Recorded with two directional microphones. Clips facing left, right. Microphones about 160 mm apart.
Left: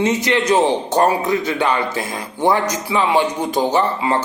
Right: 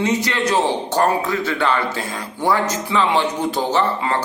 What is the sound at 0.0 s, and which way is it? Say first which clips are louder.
A man's voice: left 2 dB; 20° left (ahead or behind).